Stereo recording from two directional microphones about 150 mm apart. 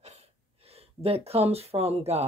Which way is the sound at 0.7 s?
40° right (ahead or behind).